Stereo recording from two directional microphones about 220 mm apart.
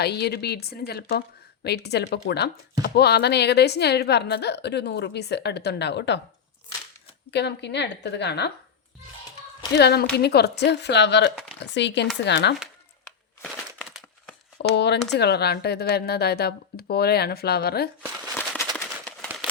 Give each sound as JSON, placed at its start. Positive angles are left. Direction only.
{"t": 0.0, "sound": "speech", "side_deg": 45}
{"t": 7.3, "sound": "speech", "side_deg": 50}
{"t": 9.7, "sound": "speech", "side_deg": 50}
{"t": 13.4, "sound": "a sound", "side_deg": -5}
{"t": 14.6, "sound": "speech", "side_deg": 50}
{"t": 19.0, "sound": "a sound", "side_deg": 0}